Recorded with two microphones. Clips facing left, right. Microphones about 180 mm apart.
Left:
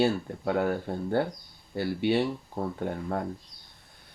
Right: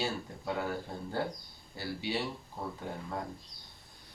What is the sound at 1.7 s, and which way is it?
Speech, 60° left (ahead or behind).